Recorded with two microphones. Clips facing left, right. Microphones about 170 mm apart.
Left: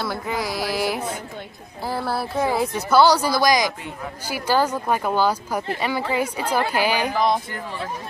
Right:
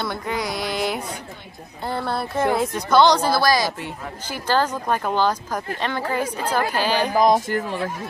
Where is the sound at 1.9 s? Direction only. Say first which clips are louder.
Even; 5° left (ahead or behind).